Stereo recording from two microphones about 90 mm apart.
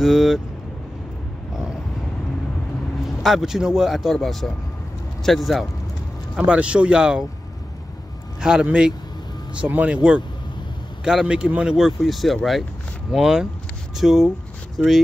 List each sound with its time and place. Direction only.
0.0 s speech: 5° right (ahead or behind)
3.2 s speech: 5° right (ahead or behind)
6.3 s speech: 10° right (ahead or behind)
8.4 s speech: 10° right (ahead or behind)
11.1 s speech: 10° right (ahead or behind)